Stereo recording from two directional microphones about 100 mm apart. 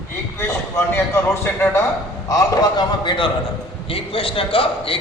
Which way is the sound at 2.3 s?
40° left (ahead or behind).